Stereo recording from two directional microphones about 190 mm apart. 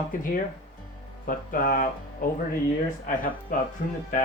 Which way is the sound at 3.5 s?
45° left (ahead or behind).